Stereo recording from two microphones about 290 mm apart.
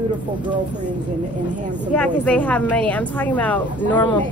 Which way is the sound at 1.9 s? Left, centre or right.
Centre.